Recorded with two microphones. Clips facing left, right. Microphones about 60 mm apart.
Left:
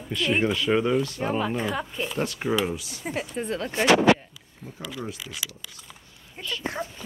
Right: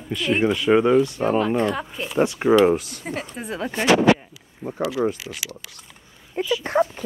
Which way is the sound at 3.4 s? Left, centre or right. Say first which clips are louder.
Right 1 dB; centre.